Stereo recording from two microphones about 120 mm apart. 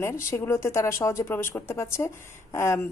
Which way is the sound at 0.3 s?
25° left (ahead or behind).